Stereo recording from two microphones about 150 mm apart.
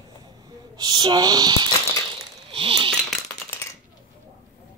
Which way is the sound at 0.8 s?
30° right (ahead or behind).